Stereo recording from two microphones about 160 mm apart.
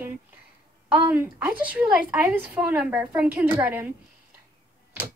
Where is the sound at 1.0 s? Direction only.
15° right (ahead or behind).